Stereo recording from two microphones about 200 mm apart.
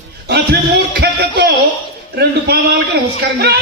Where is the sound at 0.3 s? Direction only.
55° right (ahead or behind).